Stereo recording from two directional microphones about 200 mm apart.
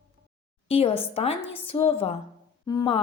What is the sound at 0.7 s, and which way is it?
A woman's voice, 30° left (ahead or behind).